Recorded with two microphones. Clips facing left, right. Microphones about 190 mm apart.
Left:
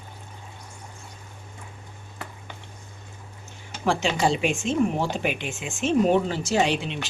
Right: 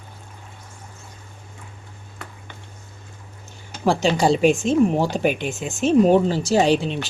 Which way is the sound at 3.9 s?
35° right (ahead or behind).